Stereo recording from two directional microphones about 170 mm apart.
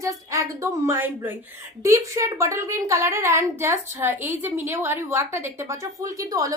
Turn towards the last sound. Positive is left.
turn(degrees=-20)  # may be behind; listen again after turning